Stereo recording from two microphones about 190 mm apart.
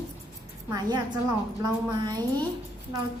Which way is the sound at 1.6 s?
20° right (ahead or behind).